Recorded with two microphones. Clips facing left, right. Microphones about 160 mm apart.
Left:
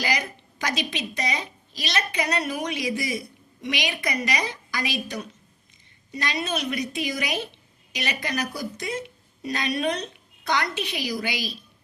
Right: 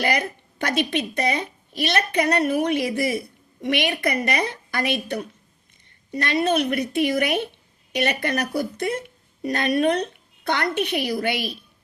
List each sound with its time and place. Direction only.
0.0 s speech: 55° right (ahead or behind)